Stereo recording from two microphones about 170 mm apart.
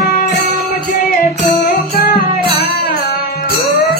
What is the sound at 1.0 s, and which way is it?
Music, 50° left (ahead or behind).